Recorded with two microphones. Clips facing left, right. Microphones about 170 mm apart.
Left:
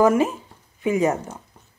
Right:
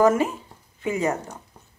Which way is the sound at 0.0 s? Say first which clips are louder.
Left 1 dB; 15° left (ahead or behind).